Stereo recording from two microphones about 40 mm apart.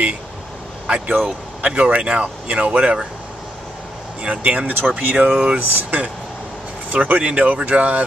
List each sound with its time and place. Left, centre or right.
0.8 s speech: right
4.2 s speech: right